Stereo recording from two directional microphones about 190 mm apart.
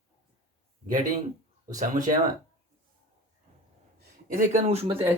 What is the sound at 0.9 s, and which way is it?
Speech, 45° right (ahead or behind).